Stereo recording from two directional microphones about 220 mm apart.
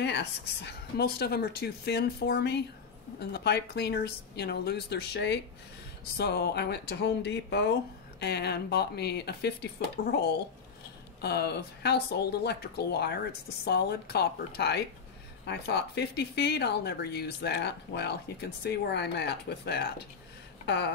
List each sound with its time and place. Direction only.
0.0 s speech: 50° left (ahead or behind)
11.1 s speech: 45° left (ahead or behind)
20.6 s a sound: 50° left (ahead or behind)